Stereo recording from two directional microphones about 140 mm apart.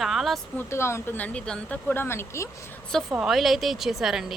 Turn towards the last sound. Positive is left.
turn(degrees=-5)  # may be behind; listen again after turning